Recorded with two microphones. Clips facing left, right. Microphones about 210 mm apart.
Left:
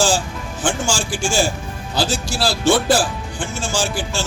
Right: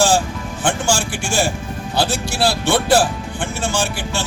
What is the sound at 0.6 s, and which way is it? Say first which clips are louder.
Speech: right 2 dB; 60° right (ahead or behind).